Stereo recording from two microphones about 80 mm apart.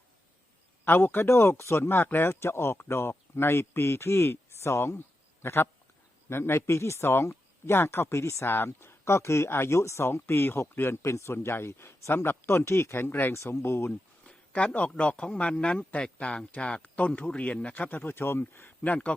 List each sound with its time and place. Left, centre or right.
0.9 s speech: left
14.3 s speech: centre